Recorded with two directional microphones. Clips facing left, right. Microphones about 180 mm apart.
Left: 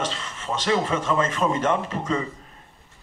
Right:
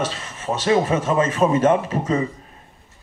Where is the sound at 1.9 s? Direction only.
35° right (ahead or behind).